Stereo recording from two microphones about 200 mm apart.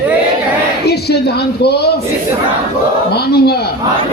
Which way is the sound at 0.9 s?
55° left (ahead or behind).